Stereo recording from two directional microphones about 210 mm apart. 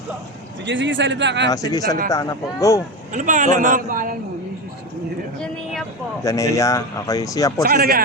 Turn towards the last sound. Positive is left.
turn(degrees=-45)  # may be behind; listen again after turning